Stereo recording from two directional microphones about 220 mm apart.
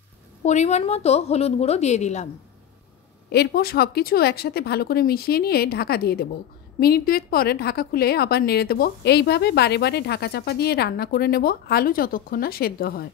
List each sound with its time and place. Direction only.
0.4 s a woman's voice: 30° left (ahead or behind)
3.3 s a woman's voice: 45° left (ahead or behind)